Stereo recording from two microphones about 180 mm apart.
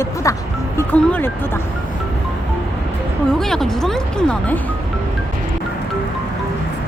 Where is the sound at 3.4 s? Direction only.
Centre (ahead or behind).